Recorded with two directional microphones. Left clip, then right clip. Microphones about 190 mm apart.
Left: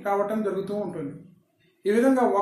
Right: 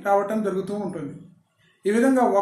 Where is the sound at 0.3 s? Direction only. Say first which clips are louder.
Right 2 dB; 20° right (ahead or behind).